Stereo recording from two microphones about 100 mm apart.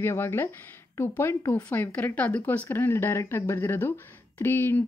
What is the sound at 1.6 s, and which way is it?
Speech, 20° left (ahead or behind).